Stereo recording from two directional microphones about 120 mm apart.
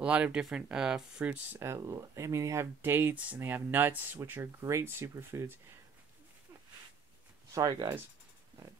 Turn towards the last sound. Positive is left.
turn(degrees=-35)  # may be behind; listen again after turning